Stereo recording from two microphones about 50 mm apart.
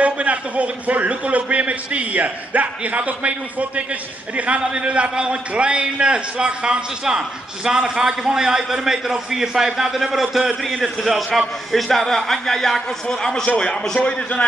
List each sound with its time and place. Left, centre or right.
0.0 s a man's voice: right; by 14.4 s left